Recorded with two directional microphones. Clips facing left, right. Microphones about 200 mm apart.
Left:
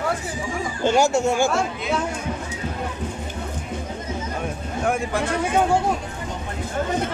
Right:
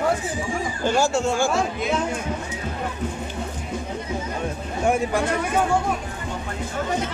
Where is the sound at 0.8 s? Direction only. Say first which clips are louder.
Left 3 dB; 20° left (ahead or behind).